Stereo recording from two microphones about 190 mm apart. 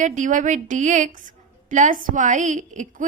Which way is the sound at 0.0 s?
40° right (ahead or behind).